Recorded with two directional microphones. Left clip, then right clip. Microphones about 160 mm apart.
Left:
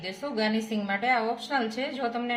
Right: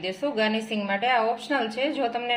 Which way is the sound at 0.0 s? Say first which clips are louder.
Right 4 dB; 40° right (ahead or behind).